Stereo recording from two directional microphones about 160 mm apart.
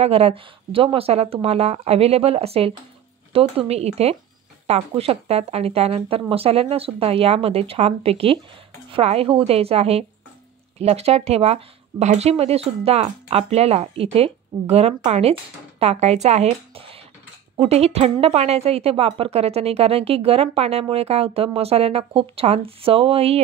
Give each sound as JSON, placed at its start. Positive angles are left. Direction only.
{"t": 0.0, "sound": "speech", "side_deg": -40}